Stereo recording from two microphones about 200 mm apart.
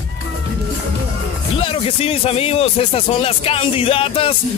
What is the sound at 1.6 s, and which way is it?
Speech, 25° left (ahead or behind).